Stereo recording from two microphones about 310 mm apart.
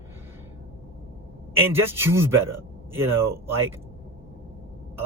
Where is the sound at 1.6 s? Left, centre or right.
Centre.